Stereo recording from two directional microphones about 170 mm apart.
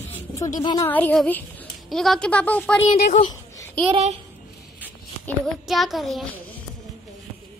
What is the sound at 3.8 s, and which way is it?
Speech, 35° right (ahead or behind).